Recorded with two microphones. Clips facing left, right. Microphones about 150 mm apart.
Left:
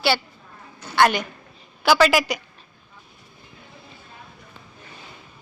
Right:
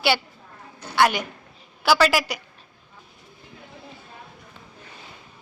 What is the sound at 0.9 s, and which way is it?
A woman's voice, 10° right (ahead or behind).